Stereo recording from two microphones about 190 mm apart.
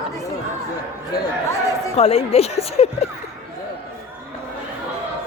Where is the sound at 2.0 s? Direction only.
30° left (ahead or behind).